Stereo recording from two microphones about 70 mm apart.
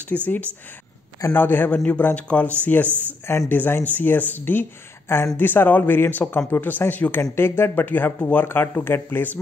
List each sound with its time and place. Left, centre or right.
0.1 s speech: left
1.3 s speech: left